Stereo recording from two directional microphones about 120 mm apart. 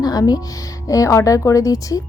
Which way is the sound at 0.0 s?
30° left (ahead or behind).